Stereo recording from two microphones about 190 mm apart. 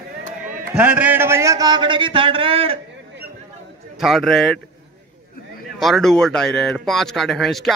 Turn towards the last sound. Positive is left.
turn(degrees=0)  # may be behind; listen again after turning